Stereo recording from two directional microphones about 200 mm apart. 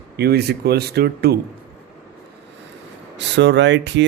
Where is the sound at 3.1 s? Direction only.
60° right (ahead or behind).